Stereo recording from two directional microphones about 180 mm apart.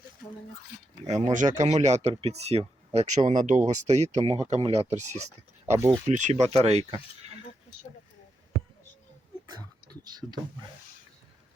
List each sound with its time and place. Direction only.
1.0 s speech: 40° right (ahead or behind)
5.7 s speech: 15° right (ahead or behind)
6.1 s speech: 40° right (ahead or behind)
9.5 s a sound: 20° right (ahead or behind)